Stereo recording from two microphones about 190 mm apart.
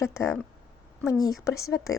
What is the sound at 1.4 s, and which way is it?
Speech, 15° left (ahead or behind).